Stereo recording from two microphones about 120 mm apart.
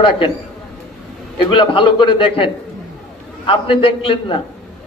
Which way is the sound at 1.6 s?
45° left (ahead or behind).